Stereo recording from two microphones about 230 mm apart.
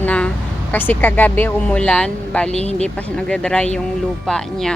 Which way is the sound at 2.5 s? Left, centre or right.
Left.